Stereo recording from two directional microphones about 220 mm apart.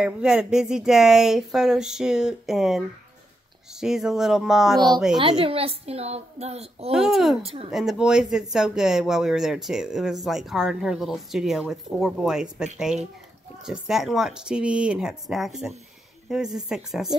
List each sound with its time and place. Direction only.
0.0 s speech: 5° right (ahead or behind)
3.8 s speech: centre (ahead or behind)
5.4 s a woman's voice: 25° right (ahead or behind)
6.9 s speech: centre (ahead or behind)